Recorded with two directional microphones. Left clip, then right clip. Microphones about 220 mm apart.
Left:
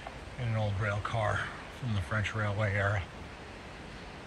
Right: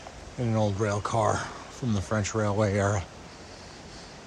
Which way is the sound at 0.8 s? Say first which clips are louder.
Right 5 dB; 20° right (ahead or behind).